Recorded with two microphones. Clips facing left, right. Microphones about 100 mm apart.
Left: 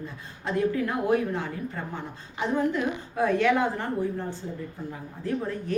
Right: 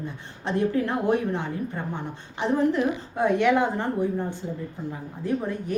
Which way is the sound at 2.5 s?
30° right (ahead or behind).